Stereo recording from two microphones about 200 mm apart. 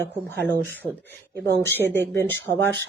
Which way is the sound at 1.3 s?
55° right (ahead or behind).